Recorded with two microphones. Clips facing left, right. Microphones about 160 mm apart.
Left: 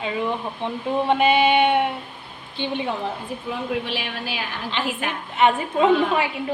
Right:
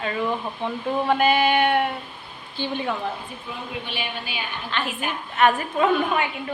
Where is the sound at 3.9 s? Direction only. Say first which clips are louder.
Left 3 dB; 90° left.